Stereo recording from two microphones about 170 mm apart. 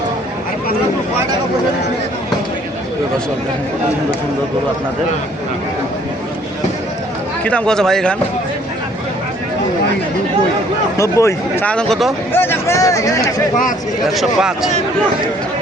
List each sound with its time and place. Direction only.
7.4 s a man's voice: 5° left (ahead or behind)
10.9 s speech: 15° left (ahead or behind); by 12.1 s centre (ahead or behind)
12.3 s speech: 15° left (ahead or behind)
14.0 s a man's voice: centre (ahead or behind)